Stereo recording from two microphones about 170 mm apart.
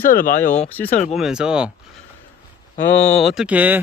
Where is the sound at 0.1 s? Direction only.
55° left (ahead or behind).